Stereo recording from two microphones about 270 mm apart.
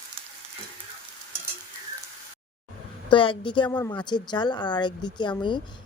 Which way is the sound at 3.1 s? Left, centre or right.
Centre.